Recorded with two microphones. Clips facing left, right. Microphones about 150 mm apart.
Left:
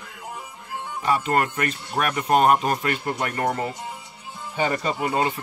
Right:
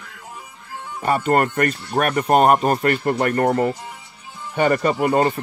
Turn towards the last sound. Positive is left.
turn(degrees=-55)  # may be behind; listen again after turning